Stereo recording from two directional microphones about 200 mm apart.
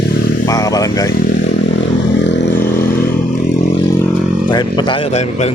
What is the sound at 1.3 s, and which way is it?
Vehicle, 60° left (ahead or behind).